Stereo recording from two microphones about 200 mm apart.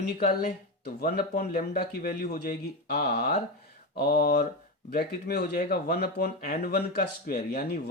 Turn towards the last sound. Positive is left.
turn(degrees=50)  # may be behind; listen again after turning